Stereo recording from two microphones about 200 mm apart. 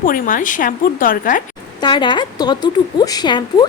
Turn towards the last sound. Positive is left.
turn(degrees=20)  # may be behind; listen again after turning